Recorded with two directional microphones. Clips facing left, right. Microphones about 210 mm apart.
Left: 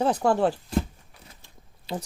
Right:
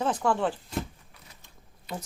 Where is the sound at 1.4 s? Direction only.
30° left (ahead or behind).